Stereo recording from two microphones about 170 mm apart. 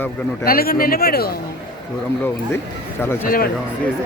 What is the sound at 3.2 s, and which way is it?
Speech, 55° left (ahead or behind).